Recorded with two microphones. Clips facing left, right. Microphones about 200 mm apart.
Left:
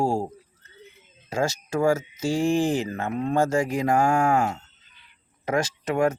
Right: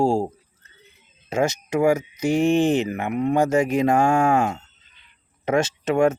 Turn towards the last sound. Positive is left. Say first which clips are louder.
# right 4 dB
turn(degrees=-25)  # may be behind; listen again after turning